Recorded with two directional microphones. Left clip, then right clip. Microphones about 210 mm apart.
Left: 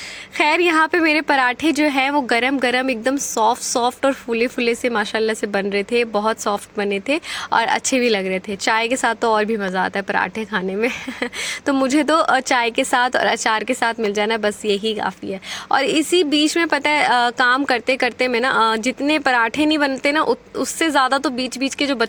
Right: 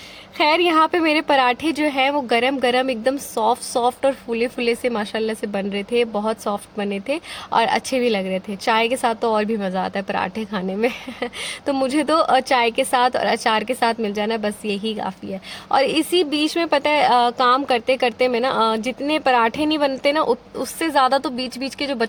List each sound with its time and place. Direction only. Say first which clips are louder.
0.3 s a woman's voice: even; 20° left (ahead or behind)